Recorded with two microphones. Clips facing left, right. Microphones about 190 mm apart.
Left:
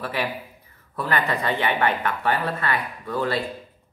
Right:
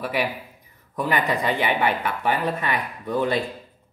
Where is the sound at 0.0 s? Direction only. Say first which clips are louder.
Right 2 dB; 10° right (ahead or behind).